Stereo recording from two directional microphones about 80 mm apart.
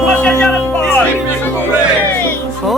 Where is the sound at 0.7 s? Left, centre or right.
Left.